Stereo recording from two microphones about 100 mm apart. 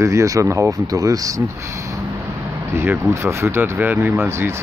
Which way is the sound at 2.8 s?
25° right (ahead or behind).